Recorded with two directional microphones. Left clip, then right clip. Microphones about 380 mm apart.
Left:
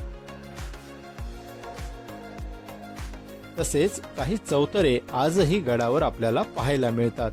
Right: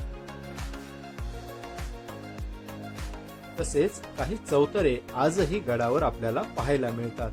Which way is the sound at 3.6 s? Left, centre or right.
Left.